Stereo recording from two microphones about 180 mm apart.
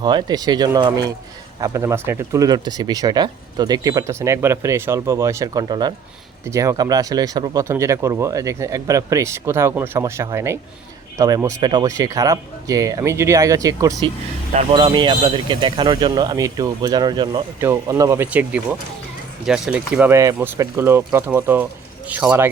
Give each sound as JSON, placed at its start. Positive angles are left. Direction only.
{"t": 0.0, "sound": "speech", "side_deg": -25}
{"t": 14.5, "sound": "speech", "side_deg": -35}